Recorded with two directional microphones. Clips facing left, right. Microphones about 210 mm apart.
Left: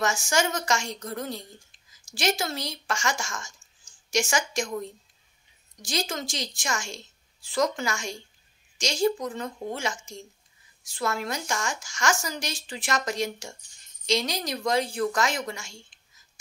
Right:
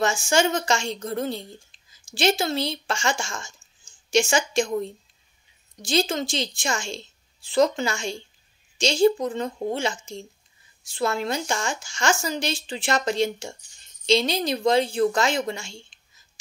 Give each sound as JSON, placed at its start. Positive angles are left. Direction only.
{"t": 0.0, "sound": "a woman's voice", "side_deg": -30}